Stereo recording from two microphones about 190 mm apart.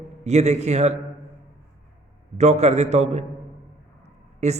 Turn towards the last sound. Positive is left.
turn(degrees=-35)  # may be behind; listen again after turning